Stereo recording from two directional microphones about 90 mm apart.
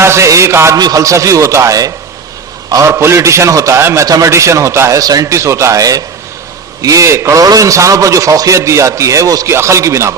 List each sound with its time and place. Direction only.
0.0 s a man's voice: 30° right (ahead or behind)
0.8 s a man's voice: 45° right (ahead or behind)
2.9 s a man's voice: 30° right (ahead or behind)